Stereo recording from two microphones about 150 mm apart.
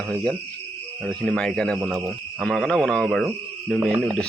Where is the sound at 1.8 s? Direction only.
20° right (ahead or behind).